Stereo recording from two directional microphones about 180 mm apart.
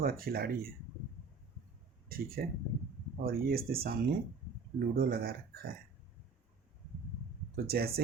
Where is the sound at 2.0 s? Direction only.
55° right (ahead or behind).